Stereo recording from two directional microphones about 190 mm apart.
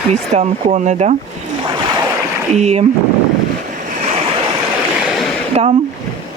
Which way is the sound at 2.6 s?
35° right (ahead or behind).